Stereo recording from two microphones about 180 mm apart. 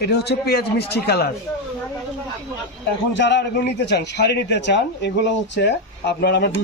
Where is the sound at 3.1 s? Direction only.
75° left (ahead or behind).